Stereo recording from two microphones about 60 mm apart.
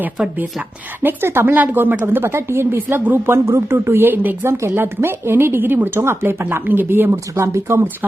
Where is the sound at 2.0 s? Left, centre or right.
Right.